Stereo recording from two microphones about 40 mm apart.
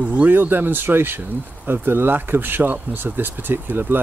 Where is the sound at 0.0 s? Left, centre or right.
Right.